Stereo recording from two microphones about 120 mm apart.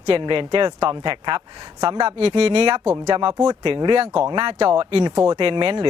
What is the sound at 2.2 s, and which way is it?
Speech, 50° right (ahead or behind).